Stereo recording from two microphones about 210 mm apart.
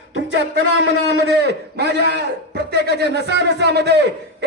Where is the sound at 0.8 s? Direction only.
55° right (ahead or behind).